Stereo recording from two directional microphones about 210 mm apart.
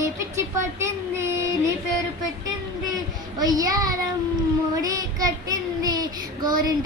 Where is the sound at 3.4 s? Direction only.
15° right (ahead or behind).